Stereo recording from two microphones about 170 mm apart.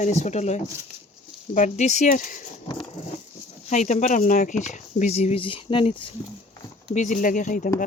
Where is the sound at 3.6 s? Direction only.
45° left (ahead or behind).